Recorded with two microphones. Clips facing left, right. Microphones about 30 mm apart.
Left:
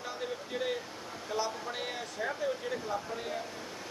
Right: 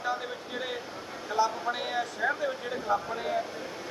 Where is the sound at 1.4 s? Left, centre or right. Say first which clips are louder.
Right 9 dB; centre.